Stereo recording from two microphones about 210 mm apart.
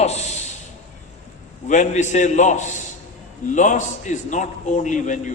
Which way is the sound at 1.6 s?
35° left (ahead or behind).